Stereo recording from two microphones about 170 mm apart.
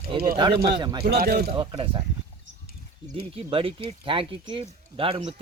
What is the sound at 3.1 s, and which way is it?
Speech, 30° right (ahead or behind).